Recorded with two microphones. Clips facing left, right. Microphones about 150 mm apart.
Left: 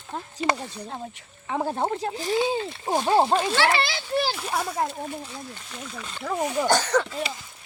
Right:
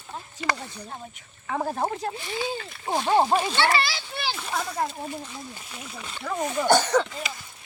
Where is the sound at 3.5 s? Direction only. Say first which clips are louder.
Left 1 dB; 60° left (ahead or behind).